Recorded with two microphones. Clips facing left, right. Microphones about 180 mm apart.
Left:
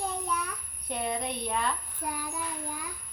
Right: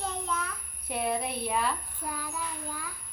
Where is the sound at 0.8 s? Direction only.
5° right (ahead or behind).